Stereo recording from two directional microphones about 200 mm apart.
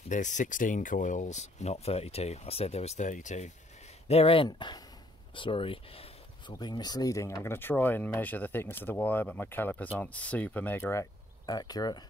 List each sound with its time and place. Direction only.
0.1 s speech: 40° left (ahead or behind); by 12.0 s 20° left (ahead or behind)